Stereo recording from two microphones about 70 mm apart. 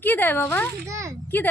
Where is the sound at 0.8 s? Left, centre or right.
Right.